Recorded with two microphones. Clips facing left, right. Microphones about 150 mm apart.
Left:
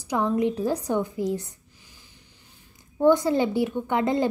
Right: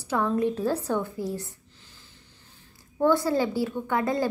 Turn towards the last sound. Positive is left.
turn(degrees=20)  # may be behind; listen again after turning